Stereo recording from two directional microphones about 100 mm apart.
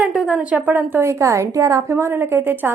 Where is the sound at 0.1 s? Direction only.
5° right (ahead or behind).